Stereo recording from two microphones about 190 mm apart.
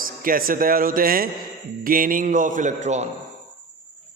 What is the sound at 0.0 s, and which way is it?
A man's voice, 50° right (ahead or behind).